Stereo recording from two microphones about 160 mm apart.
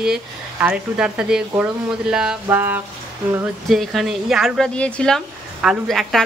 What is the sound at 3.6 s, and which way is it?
Speech, centre (ahead or behind).